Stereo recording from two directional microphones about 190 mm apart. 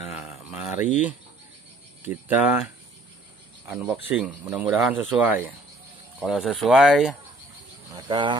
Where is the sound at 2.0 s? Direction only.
10° right (ahead or behind).